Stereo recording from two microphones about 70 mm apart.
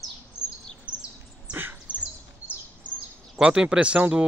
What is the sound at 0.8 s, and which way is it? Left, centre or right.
Bird, centre.